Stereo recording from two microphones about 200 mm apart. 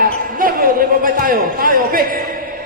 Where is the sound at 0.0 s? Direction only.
45° right (ahead or behind).